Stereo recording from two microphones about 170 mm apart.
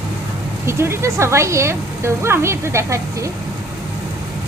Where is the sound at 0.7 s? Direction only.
15° right (ahead or behind).